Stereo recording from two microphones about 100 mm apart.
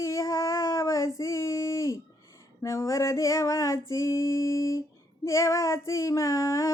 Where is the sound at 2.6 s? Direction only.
30° left (ahead or behind).